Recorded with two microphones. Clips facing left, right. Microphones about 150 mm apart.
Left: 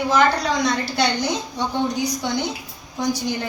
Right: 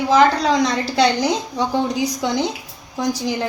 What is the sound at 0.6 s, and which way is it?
A woman's voice, 90° right.